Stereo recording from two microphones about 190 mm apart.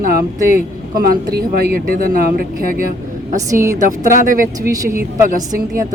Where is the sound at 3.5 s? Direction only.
15° right (ahead or behind).